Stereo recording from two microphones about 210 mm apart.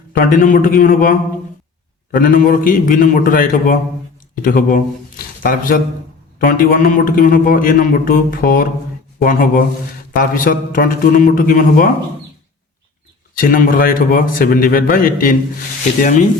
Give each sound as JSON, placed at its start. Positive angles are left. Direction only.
{"t": 0.2, "sound": "a man's voice", "side_deg": 40}
{"t": 2.1, "sound": "a man's voice", "side_deg": 40}
{"t": 13.4, "sound": "a man's voice", "side_deg": 40}